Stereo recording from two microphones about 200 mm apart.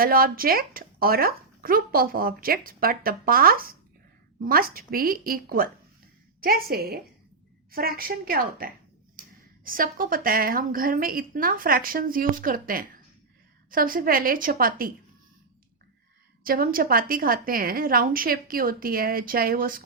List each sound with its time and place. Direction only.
0.0 s speech: 45° right (ahead or behind)
16.4 s speech: 45° right (ahead or behind)